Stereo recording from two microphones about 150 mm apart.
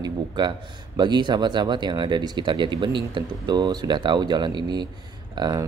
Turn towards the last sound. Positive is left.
turn(degrees=-30)  # may be behind; listen again after turning